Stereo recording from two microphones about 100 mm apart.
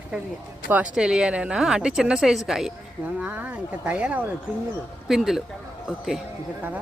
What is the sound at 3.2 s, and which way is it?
A woman's voice, 15° right (ahead or behind).